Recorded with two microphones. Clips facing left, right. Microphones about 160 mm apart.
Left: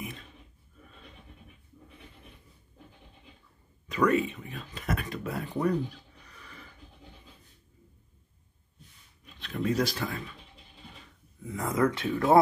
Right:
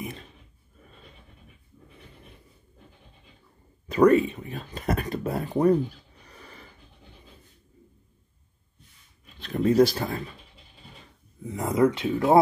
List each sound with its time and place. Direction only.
3.8 s speech: 35° right (ahead or behind)
6.2 s a sound: 35° right (ahead or behind)
9.4 s speech: 35° right (ahead or behind)
11.4 s speech: 25° right (ahead or behind)